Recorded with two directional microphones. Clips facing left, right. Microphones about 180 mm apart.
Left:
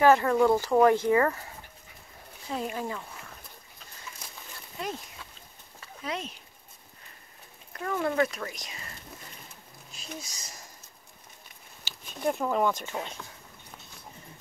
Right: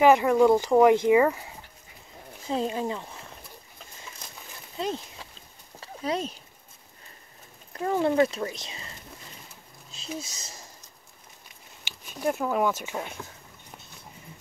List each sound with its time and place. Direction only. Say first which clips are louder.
0.0 s speech: right 3 dB; 15° right (ahead or behind)
2.5 s speech: right 5 dB; 25° right (ahead or behind)
4.7 s a sound: right 5 dB; 25° right (ahead or behind)
7.7 s speech: right 5 dB; 25° right (ahead or behind)
9.9 s speech: right 5 dB; 25° right (ahead or behind)
11.8 s speech: right 1 dB; 5° right (ahead or behind)